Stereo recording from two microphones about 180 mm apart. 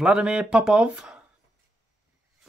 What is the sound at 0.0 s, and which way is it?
Speech, 5° right (ahead or behind).